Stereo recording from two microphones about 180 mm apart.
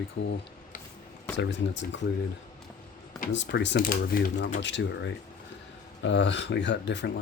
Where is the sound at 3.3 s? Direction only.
80° left; by 4.6 s 55° left (ahead or behind).